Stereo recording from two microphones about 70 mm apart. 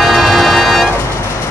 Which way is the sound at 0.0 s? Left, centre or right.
Centre.